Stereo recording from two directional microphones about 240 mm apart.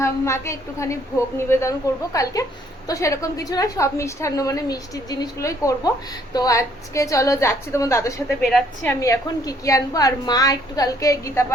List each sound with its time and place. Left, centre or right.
0.0 s a woman's voice: centre